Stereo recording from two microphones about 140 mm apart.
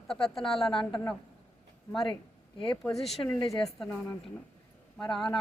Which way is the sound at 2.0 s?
35° left (ahead or behind).